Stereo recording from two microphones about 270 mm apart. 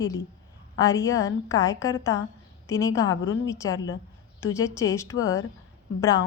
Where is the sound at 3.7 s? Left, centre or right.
Left.